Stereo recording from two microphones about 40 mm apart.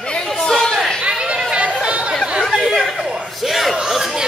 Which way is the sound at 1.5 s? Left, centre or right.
Right.